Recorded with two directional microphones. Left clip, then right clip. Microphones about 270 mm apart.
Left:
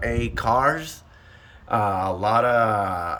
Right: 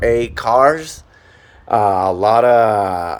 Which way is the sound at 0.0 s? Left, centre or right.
Centre.